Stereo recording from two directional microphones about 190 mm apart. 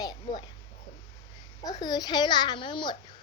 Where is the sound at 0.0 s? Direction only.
20° left (ahead or behind).